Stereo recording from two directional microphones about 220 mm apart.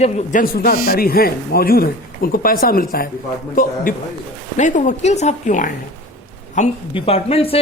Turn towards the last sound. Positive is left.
turn(degrees=25)  # may be behind; listen again after turning